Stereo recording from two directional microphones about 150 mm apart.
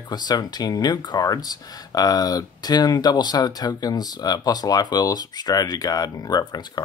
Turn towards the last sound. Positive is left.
turn(degrees=25)  # may be behind; listen again after turning